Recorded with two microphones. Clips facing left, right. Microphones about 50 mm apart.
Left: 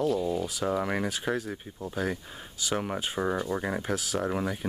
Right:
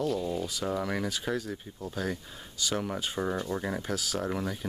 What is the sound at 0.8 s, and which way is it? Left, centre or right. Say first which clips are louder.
Speech: left 2 dB; left.